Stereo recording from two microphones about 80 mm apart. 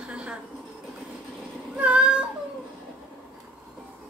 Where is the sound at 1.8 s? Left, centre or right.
Centre.